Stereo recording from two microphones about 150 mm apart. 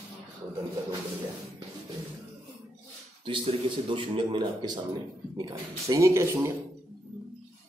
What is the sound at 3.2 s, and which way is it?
Speech, 35° right (ahead or behind).